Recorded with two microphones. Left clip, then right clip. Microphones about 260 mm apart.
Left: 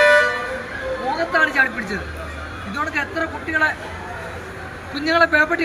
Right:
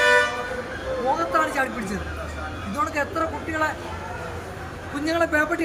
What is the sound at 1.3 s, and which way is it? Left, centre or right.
Speech, centre.